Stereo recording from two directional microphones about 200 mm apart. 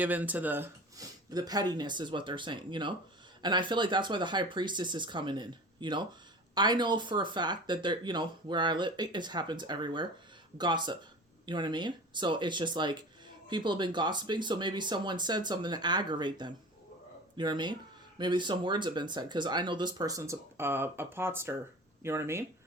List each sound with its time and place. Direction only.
0.0 s speech: 10° right (ahead or behind)